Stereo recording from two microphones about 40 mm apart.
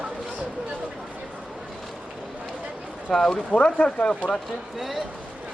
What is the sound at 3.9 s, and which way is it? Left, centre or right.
Speech, left.